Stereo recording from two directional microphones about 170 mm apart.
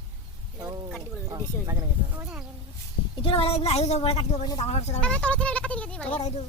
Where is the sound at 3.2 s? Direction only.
35° left (ahead or behind).